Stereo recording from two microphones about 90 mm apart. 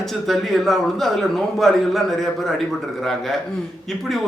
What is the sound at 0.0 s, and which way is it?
A man's voice, centre (ahead or behind).